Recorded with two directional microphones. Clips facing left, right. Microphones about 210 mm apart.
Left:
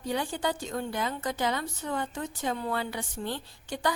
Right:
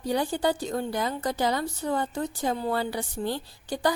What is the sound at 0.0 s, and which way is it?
A woman's voice, 35° right (ahead or behind).